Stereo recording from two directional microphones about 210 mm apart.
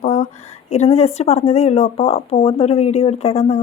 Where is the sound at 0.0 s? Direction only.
30° left (ahead or behind).